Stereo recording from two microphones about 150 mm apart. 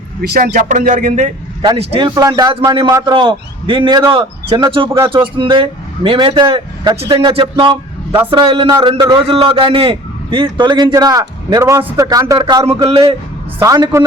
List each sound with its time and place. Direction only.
0.2 s a man's voice: 80° right; by 1.3 s 60° right (ahead or behind)
1.6 s a man's voice: 40° right (ahead or behind); by 14.0 s 25° right (ahead or behind)